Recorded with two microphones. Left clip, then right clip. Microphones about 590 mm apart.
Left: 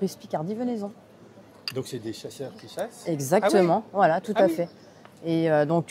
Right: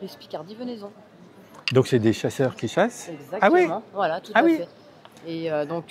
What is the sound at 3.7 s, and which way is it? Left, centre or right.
Speech, left.